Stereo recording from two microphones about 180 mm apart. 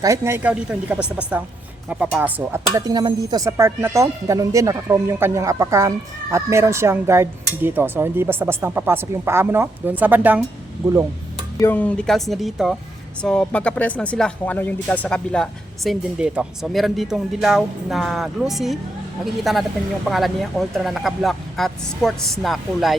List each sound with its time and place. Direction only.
0.0 s speech: 15° right (ahead or behind)
2.7 s speech: 20° right (ahead or behind)
11.6 s speech: 10° left (ahead or behind)